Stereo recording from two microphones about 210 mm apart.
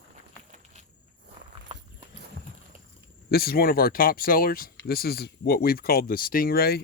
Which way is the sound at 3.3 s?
45° left (ahead or behind).